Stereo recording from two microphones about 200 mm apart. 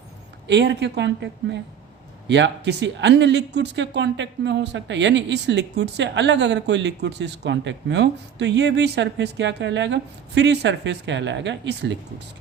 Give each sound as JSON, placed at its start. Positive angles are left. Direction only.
{"t": 0.4, "sound": "speech", "side_deg": -60}